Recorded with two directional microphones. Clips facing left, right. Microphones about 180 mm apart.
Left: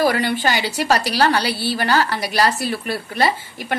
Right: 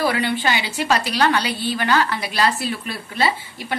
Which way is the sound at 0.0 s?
40° left (ahead or behind).